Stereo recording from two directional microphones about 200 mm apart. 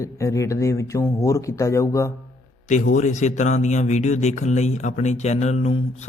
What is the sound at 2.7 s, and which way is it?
Speech, 40° left (ahead or behind).